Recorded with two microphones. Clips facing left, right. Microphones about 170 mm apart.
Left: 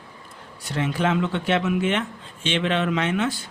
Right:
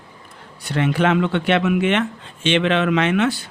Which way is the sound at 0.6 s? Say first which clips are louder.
Right 5 dB; 70° right (ahead or behind).